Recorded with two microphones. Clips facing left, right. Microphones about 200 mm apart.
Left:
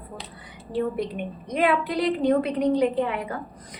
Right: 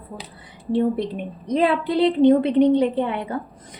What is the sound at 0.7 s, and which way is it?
A woman's voice, 30° right (ahead or behind).